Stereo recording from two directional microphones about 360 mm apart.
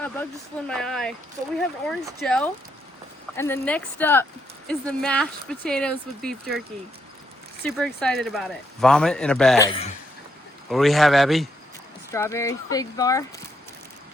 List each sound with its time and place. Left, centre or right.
0.7 s speech: centre
7.6 s speech: centre
9.6 s speech: centre
10.7 s speech: centre